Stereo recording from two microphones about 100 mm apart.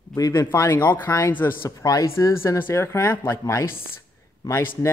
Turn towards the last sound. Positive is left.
turn(degrees=25)  # may be behind; listen again after turning